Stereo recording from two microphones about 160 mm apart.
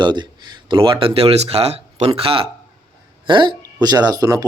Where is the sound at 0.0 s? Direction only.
25° right (ahead or behind).